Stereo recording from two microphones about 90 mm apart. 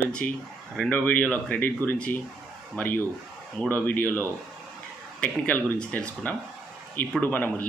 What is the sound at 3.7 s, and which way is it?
Speech, 20° left (ahead or behind).